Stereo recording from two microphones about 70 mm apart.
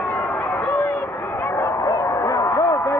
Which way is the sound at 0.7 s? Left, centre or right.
Left.